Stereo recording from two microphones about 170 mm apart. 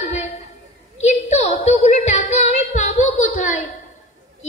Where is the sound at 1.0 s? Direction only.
40° left (ahead or behind).